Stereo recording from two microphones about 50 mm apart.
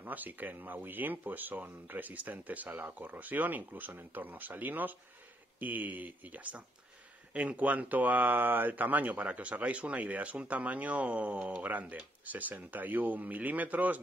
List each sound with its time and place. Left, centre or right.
0.0 s speech: right